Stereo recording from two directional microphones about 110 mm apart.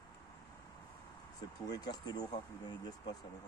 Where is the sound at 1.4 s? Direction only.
35° left (ahead or behind).